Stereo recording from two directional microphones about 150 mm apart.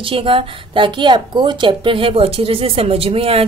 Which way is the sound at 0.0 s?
35° right (ahead or behind).